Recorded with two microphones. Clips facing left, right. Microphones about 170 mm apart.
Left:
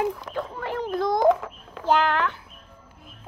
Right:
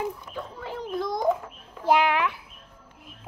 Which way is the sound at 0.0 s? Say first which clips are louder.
Left 5 dB; 80° left.